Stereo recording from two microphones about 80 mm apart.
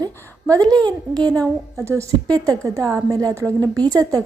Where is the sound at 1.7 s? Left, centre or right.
Right.